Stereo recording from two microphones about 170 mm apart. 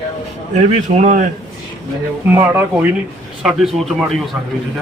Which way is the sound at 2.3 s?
15° right (ahead or behind).